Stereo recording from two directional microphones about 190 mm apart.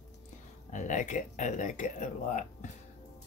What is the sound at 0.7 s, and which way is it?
Speech, 40° left (ahead or behind).